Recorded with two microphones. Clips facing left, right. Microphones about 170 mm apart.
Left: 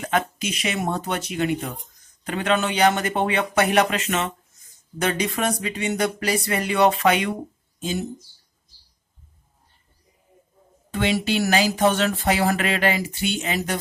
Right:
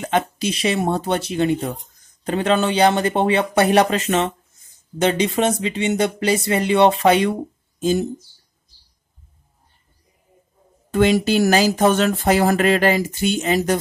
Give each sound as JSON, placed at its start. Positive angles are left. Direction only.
{"t": 0.0, "sound": "speech", "side_deg": -30}
{"t": 10.9, "sound": "speech", "side_deg": -45}